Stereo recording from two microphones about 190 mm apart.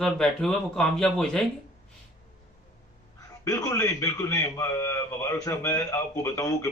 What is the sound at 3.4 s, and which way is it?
A man's voice, 15° left (ahead or behind).